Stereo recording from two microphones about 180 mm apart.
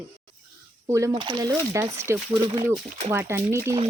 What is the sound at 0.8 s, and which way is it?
Speech, 15° right (ahead or behind).